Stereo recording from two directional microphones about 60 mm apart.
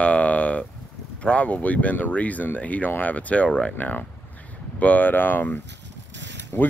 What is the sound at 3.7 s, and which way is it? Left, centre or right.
Speech, left.